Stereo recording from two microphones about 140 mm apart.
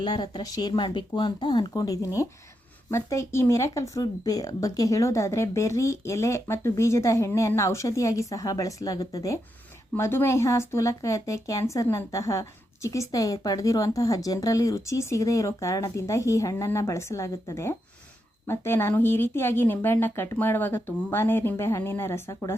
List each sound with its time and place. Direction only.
0.0 s speech: 30° left (ahead or behind)